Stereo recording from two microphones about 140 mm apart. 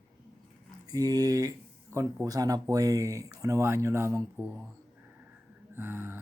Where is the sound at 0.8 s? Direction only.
25° right (ahead or behind).